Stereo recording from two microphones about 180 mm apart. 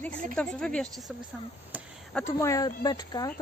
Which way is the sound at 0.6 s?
5° left (ahead or behind).